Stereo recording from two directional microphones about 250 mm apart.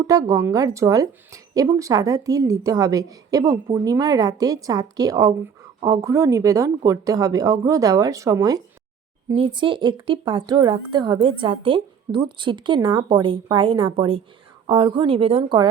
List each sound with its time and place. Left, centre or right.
0.1 s a woman's voice: centre